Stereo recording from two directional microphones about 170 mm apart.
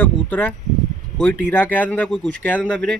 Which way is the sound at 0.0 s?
10° left (ahead or behind).